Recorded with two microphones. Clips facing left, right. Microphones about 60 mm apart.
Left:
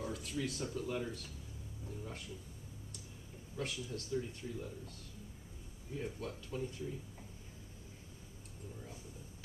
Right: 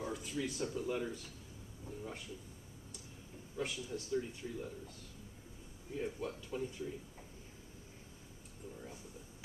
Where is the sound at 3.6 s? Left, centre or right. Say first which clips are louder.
Right 1 dB; centre.